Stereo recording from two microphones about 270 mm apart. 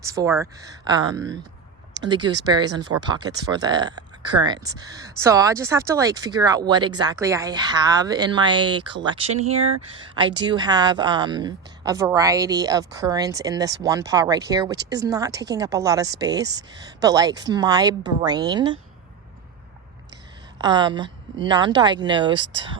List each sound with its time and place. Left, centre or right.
0.0 s speech: centre
20.6 s speech: centre